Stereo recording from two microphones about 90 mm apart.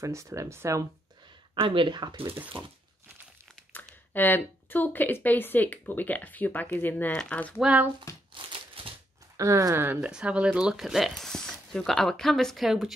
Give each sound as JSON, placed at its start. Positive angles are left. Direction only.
{"t": 0.0, "sound": "speech", "side_deg": -35}
{"t": 1.5, "sound": "speech", "side_deg": -80}
{"t": 3.7, "sound": "speech", "side_deg": 20}
{"t": 7.5, "sound": "speech", "side_deg": -15}
{"t": 8.8, "sound": "a sound", "side_deg": -90}
{"t": 9.4, "sound": "speech", "side_deg": -35}
{"t": 9.9, "sound": "speech", "side_deg": -10}